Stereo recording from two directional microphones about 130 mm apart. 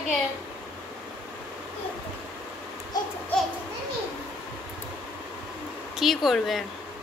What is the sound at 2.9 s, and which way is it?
Babbling, 30° left (ahead or behind).